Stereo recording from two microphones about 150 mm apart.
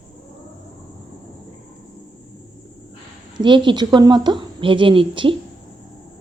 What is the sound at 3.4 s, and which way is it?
A woman's voice, 30° right (ahead or behind).